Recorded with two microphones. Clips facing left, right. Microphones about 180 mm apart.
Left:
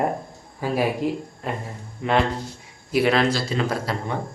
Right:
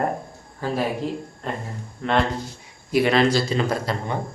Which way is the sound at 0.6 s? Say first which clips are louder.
Left 2 dB; 10° left (ahead or behind).